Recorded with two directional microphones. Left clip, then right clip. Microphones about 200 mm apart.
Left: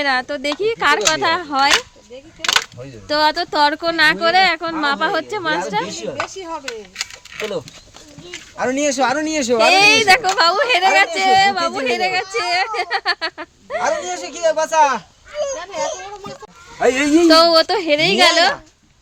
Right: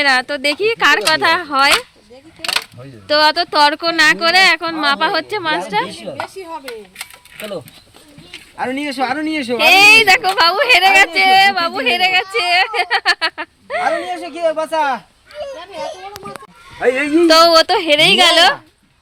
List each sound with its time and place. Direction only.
0.0 s speech: 5° right (ahead or behind)
3.1 s speech: centre (ahead or behind)
8.5 s speech: 60° left (ahead or behind)
9.6 s speech: 5° right (ahead or behind)
14.1 s speech: 50° left (ahead or behind)
15.5 s a child's voice: 10° left (ahead or behind)
16.7 s a man's voice: 70° left (ahead or behind)
17.2 s speech: centre (ahead or behind)